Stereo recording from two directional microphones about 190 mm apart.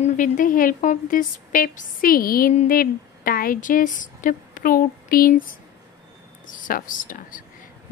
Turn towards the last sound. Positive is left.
turn(degrees=45)  # may be behind; listen again after turning